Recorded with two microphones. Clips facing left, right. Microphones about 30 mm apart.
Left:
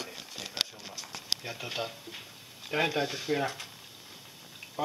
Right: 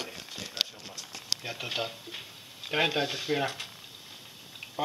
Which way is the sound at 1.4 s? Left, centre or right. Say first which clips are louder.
Right 2 dB; right.